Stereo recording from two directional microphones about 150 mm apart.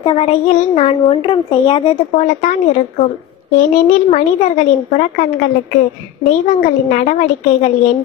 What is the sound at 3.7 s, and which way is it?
Speech, 50° left (ahead or behind).